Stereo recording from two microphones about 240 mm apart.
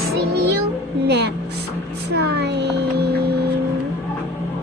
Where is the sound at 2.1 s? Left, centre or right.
Right.